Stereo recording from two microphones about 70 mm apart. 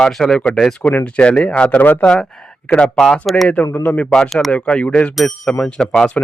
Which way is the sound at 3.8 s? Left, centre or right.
Left.